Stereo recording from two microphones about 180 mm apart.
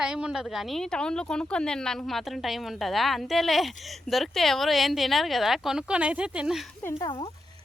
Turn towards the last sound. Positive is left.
turn(degrees=25)  # may be behind; listen again after turning